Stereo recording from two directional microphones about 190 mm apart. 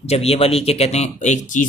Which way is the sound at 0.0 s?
35° left (ahead or behind).